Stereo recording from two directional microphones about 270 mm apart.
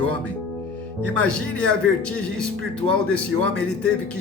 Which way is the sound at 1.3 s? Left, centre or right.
Centre.